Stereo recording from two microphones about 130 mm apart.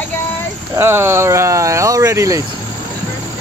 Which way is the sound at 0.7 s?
20° right (ahead or behind).